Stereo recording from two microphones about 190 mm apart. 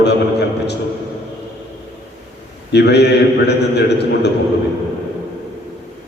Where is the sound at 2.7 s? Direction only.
60° left (ahead or behind).